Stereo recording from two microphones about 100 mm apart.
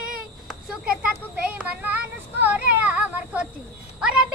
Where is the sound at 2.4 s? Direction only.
15° right (ahead or behind).